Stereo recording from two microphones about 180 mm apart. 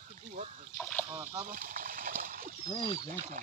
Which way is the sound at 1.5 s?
50° right (ahead or behind).